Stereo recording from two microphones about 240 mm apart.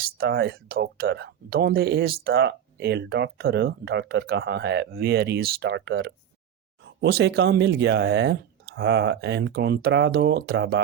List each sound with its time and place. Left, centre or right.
0.2 s speech: right